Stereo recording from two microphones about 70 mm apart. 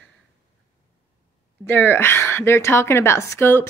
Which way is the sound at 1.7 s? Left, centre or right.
Left.